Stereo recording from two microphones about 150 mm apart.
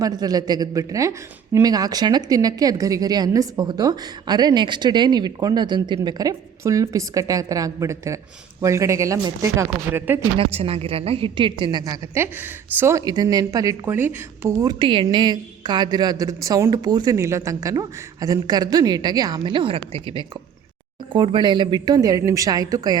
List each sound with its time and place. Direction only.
0.0 s a woman's voice: 25° right (ahead or behind)
10.3 s a woman's voice: 40° right (ahead or behind)
12.1 s a woman's voice: 15° right (ahead or behind)